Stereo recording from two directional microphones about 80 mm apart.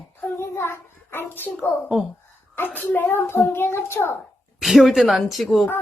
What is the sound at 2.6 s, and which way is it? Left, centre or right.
A child's voice, left.